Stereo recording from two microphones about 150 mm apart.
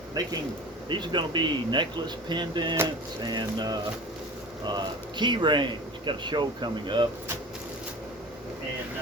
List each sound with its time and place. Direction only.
0.2 s speech: 25° right (ahead or behind)